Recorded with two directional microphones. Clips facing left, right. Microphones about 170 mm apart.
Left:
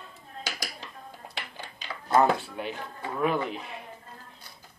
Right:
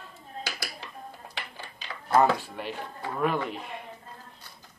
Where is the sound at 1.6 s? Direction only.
20° left (ahead or behind).